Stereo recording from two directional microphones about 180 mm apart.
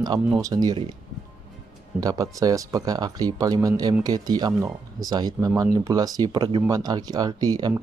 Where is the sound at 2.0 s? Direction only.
20° right (ahead or behind).